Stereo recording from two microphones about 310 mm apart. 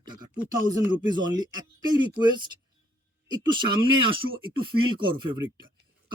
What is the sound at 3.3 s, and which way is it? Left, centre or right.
Speech, centre.